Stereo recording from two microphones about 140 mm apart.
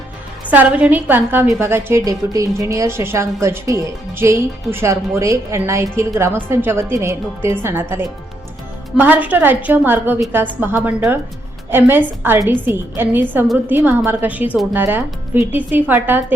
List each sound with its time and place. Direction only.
0.5 s a woman's voice: 10° right (ahead or behind)